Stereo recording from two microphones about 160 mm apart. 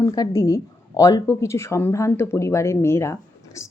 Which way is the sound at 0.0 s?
20° left (ahead or behind).